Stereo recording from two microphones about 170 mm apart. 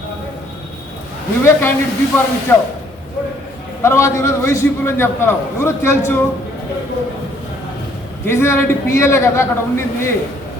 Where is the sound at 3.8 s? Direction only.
15° left (ahead or behind).